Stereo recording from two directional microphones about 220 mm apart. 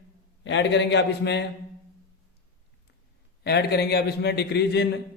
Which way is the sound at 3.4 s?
50° left (ahead or behind).